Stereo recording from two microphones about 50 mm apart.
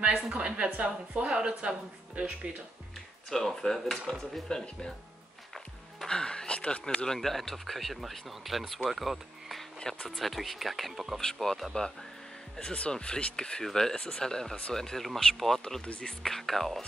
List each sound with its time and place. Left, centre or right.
0.3 s speech: right
3.3 s speech: centre
6.0 s speech: centre
7.1 s speech: centre
9.8 s speech: centre
10.0 s speech: centre
12.5 s speech: left; by 15.6 s centre
15.8 s speech: left
16.2 s speech: centre